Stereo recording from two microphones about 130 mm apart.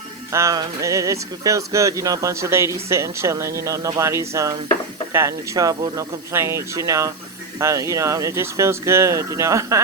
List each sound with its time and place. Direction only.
0.3 s speech: 25° right (ahead or behind)